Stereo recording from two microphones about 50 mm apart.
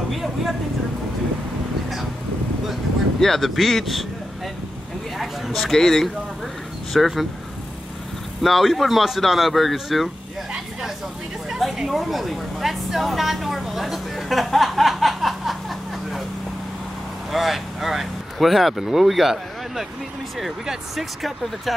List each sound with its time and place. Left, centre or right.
0.1 s a woman's voice: centre
3.2 s a woman's voice: centre
5.2 s speech: centre
8.4 s a woman's voice: centre
11.5 s a woman's voice: centre
17.3 s a woman's voice: centre